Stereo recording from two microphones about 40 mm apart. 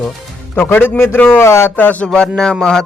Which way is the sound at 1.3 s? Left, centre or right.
Left.